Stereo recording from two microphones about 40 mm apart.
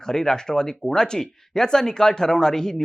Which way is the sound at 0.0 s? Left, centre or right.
Centre.